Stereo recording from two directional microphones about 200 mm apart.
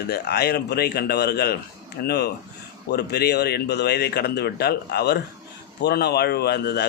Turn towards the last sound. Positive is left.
turn(degrees=55)  # may be behind; listen again after turning